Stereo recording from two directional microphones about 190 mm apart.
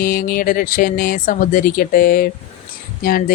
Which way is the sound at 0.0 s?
50° left (ahead or behind).